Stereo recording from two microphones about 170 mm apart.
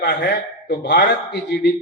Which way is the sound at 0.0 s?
85° left.